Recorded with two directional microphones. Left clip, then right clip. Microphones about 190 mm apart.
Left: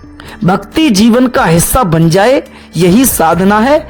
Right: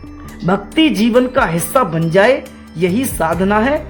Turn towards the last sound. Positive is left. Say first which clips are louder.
# left 6 dB
turn(degrees=40)  # may be behind; listen again after turning